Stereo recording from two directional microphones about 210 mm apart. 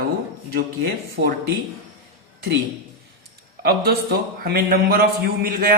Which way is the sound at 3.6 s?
45° right (ahead or behind).